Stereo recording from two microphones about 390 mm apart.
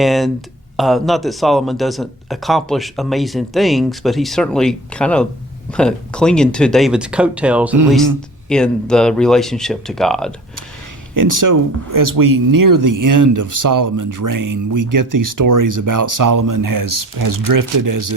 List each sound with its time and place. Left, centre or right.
0.0 s speech: centre
11.1 s speech: right